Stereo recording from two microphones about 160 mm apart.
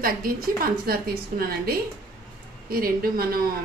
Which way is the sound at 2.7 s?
65° right (ahead or behind).